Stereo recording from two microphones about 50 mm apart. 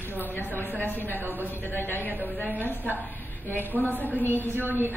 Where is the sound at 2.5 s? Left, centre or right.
Right.